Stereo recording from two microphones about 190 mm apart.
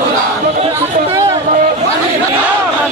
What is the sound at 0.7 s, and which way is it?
Chatter, 20° right (ahead or behind).